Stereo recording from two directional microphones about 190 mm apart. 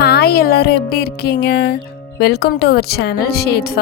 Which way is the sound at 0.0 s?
55° left (ahead or behind).